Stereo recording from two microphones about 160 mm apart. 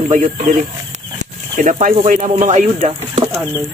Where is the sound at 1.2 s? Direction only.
50° right (ahead or behind).